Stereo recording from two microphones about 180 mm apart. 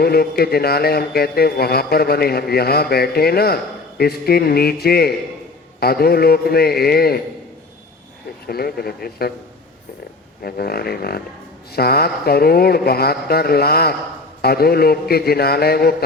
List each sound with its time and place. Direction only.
0.0 s a man's voice: 60° left (ahead or behind)
8.4 s a man's voice: 60° left (ahead or behind)
10.4 s a man's voice: 60° left (ahead or behind)